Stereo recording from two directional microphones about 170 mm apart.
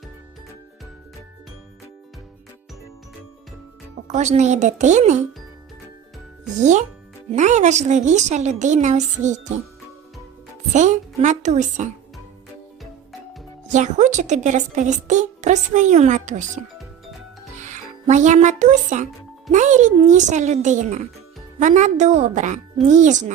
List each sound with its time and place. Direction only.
4.1 s a woman's voice: 40° right (ahead or behind)
6.6 s a woman's voice: 45° right (ahead or behind)
10.7 s a woman's voice: 45° right (ahead or behind)
13.7 s a woman's voice: 45° right (ahead or behind)
17.6 s a woman's voice: 45° right (ahead or behind)